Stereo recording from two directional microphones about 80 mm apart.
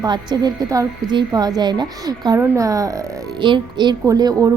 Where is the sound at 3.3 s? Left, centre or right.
Right.